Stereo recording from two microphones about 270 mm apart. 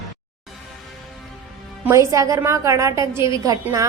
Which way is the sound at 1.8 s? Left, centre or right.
Centre.